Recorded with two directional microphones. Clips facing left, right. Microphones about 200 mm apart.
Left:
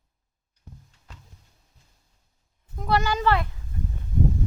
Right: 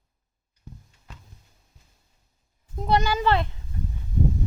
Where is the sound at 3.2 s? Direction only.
20° right (ahead or behind).